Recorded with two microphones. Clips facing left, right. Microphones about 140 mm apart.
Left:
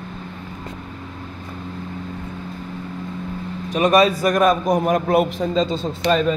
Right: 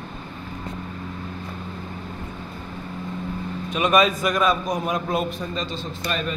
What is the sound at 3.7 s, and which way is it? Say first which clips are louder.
Speech: left 4 dB; 35° left (ahead or behind).